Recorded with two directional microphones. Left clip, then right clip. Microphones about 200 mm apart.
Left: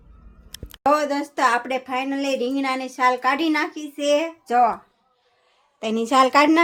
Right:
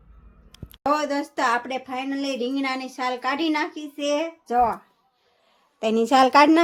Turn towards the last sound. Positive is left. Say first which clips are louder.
# even
turn(degrees=-10)  # may be behind; listen again after turning